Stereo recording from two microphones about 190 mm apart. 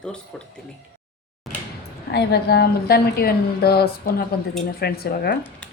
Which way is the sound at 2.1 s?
60° left (ahead or behind).